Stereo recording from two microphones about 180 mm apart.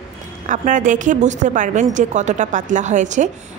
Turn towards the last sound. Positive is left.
turn(degrees=-40)  # may be behind; listen again after turning